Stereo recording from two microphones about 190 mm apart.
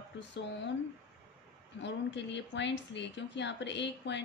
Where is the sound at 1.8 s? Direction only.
70° left (ahead or behind).